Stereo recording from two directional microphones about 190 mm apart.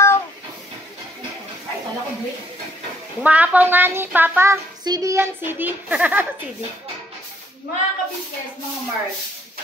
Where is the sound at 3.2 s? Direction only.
10° right (ahead or behind).